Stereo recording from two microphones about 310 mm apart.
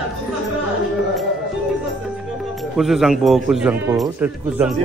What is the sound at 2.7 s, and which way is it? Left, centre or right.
Speech, centre.